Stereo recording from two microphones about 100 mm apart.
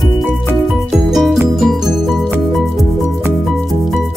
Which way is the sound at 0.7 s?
Centre (ahead or behind).